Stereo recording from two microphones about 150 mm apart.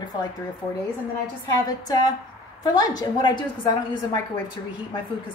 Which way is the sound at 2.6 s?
25° left (ahead or behind).